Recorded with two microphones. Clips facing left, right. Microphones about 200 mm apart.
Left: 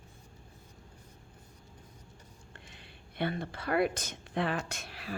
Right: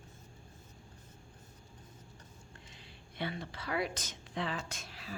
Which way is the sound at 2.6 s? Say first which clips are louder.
Left 2 dB; 60° left (ahead or behind).